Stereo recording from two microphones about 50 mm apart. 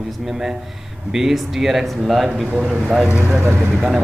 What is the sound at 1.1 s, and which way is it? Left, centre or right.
Speech, centre.